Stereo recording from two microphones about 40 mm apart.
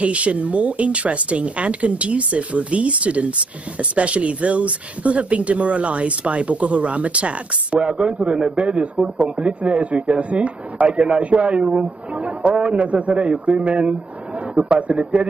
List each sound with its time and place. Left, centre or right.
0.0 s speech: right